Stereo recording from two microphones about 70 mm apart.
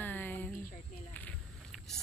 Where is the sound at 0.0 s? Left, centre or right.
Left.